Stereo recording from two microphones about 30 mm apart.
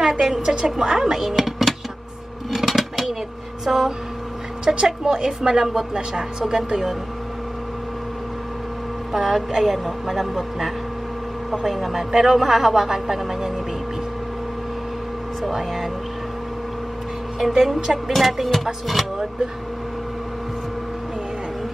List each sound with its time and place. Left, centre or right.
0.0 s speech: centre
2.5 s a sound: centre
3.6 s a woman's voice: centre
4.7 s a woman's voice: right
6.4 s a woman's voice: centre
9.1 s a woman's voice: centre
11.7 s a woman's voice: centre
15.4 s a man's voice: centre
17.4 s a woman's voice: centre
18.1 s a man's voice: centre